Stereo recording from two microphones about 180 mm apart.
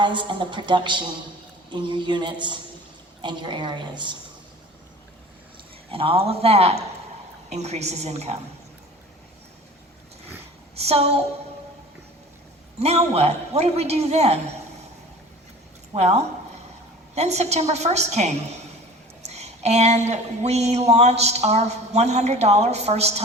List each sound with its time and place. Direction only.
0.0 s a woman's voice: 25° right (ahead or behind)
5.9 s speech: 30° right (ahead or behind)
10.8 s a woman's voice: 35° right (ahead or behind)
12.8 s speech: 35° right (ahead or behind)
16.0 s speech: 35° right (ahead or behind)